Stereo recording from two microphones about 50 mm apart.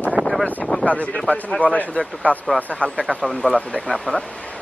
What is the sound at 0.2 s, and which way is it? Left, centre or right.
Boat, centre.